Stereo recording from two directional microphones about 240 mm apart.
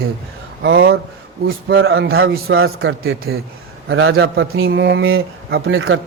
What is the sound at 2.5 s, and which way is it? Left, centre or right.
A man's voice, right.